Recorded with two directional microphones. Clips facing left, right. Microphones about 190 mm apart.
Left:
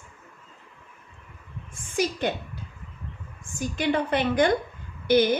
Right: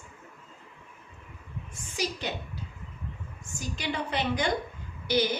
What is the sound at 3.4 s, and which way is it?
A woman's voice, 55° left (ahead or behind).